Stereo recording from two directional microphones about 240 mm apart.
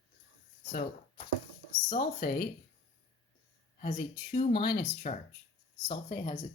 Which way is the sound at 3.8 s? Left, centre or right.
Left.